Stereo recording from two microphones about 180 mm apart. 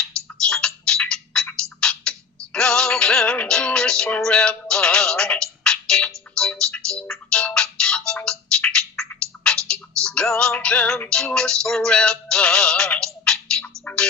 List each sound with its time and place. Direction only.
0.4 s tick-tock: 5° left (ahead or behind)
1.8 s music: 5° left (ahead or behind)
13.2 s a sound: 5° left (ahead or behind)
13.8 s music: 5° left (ahead or behind)